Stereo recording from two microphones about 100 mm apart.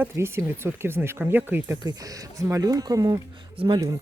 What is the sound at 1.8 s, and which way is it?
Speech, 40° right (ahead or behind).